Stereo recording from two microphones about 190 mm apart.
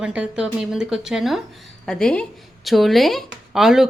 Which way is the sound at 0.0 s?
5° right (ahead or behind).